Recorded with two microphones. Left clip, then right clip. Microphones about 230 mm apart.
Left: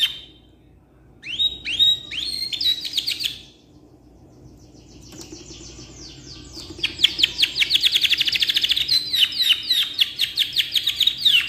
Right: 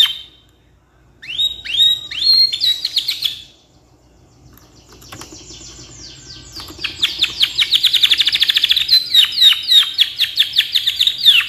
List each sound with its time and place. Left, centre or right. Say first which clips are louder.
1.7 s bird: right 5 dB; centre
6.8 s chirp: right 1 dB; centre